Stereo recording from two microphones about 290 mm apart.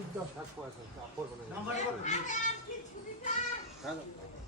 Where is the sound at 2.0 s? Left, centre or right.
Left.